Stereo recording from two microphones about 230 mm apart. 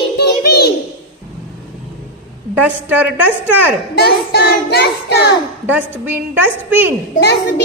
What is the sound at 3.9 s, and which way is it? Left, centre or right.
Child singing, left.